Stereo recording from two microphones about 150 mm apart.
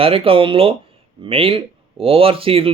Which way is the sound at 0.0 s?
35° right (ahead or behind).